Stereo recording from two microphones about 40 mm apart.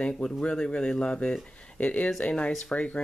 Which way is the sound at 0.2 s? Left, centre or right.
Left.